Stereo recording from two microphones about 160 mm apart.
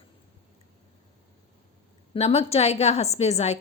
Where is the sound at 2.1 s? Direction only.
40° left (ahead or behind).